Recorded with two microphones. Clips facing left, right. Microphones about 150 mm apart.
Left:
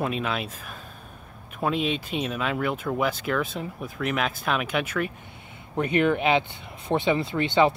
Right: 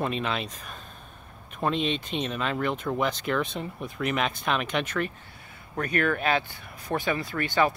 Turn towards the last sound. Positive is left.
turn(degrees=25)  # may be behind; listen again after turning